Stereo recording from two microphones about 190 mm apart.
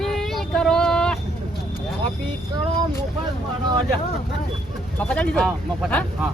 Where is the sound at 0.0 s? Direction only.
Centre (ahead or behind).